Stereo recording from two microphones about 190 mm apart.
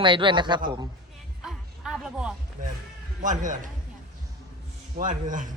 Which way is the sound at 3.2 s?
40° right (ahead or behind).